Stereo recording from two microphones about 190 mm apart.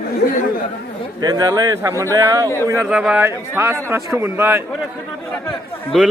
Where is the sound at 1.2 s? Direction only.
20° right (ahead or behind).